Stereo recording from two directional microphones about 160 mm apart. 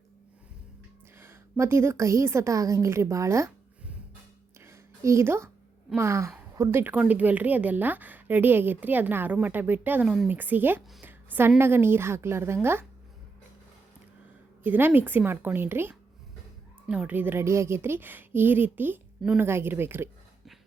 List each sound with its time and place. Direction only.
1.2 s a woman's voice: 15° right (ahead or behind)
4.6 s a sound: 15° right (ahead or behind)
6.0 s a woman's voice: 15° right (ahead or behind)
14.6 s a woman's voice: 10° right (ahead or behind)